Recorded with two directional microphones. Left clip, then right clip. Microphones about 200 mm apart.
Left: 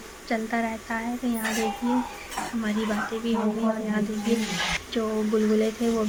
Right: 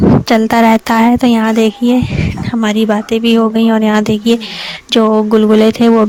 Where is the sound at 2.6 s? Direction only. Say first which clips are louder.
Right 17 dB; 50° right (ahead or behind).